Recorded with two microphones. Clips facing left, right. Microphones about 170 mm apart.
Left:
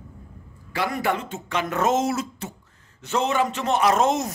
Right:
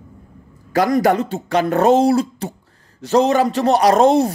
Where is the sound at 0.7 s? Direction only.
40° right (ahead or behind).